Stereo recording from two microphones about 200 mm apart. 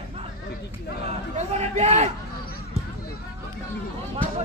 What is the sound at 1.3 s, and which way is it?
Speech, 35° right (ahead or behind).